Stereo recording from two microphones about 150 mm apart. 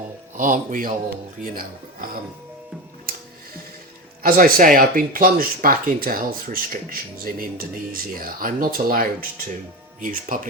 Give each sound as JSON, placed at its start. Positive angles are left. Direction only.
{"t": 0.3, "sound": "speech", "side_deg": -60}
{"t": 4.2, "sound": "speech", "side_deg": -70}